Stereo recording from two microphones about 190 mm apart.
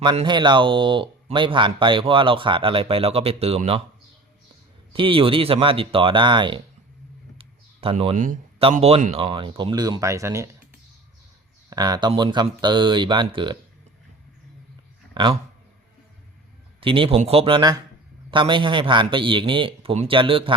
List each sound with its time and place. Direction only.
0.0 s speech: 25° right (ahead or behind)
4.9 s speech: 30° right (ahead or behind)
7.3 s a sound: 30° right (ahead or behind)
8.1 s speech: 40° right (ahead or behind); by 10.5 s 15° right (ahead or behind)
11.7 s speech: 20° right (ahead or behind)
15.1 s speech: 25° right (ahead or behind)
16.8 s speech: 30° right (ahead or behind)